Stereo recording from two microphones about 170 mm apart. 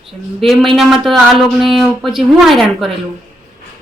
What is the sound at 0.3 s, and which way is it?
Speech, centre (ahead or behind).